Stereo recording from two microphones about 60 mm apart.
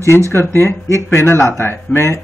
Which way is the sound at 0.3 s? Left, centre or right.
Left.